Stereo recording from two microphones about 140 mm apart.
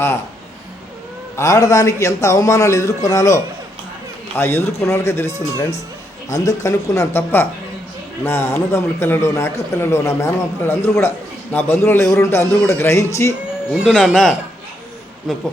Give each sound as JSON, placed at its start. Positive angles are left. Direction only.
{"t": 1.4, "sound": "a man's voice", "side_deg": 25}
{"t": 13.7, "sound": "speech", "side_deg": -5}